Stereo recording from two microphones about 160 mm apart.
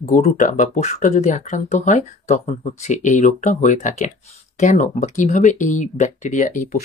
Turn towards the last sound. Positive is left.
turn(degrees=55)  # may be behind; listen again after turning